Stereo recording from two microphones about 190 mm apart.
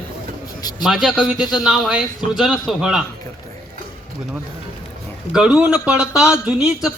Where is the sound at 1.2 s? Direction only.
20° left (ahead or behind).